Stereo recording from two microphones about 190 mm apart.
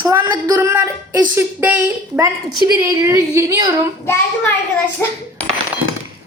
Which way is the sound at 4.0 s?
15° left (ahead or behind).